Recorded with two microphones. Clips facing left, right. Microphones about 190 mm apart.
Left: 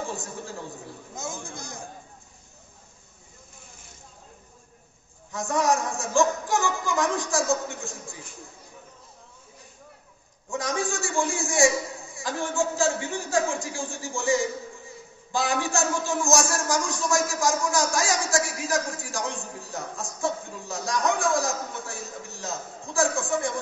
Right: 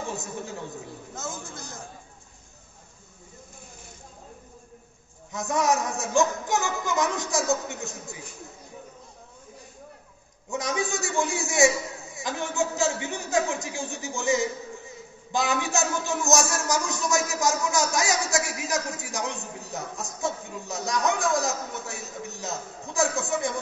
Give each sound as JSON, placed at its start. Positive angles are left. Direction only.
{"t": 0.0, "sound": "a man's voice", "side_deg": -20}
{"t": 1.1, "sound": "a man's voice", "side_deg": 10}
{"t": 5.3, "sound": "a man's voice", "side_deg": -20}
{"t": 10.5, "sound": "a man's voice", "side_deg": -20}